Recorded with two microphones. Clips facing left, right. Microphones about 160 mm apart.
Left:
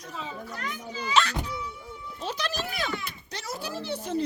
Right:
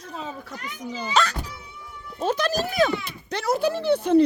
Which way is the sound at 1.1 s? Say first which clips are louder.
Right 1 dB; 40° right (ahead or behind).